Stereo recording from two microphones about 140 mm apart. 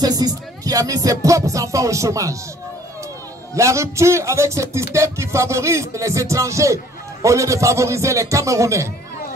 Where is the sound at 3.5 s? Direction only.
20° right (ahead or behind).